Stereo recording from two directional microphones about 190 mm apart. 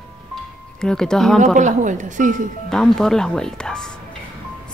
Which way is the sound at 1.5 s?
40° right (ahead or behind).